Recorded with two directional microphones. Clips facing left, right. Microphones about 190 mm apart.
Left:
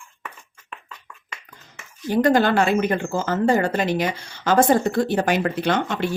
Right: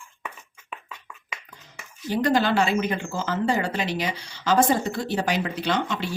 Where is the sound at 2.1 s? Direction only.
50° left (ahead or behind).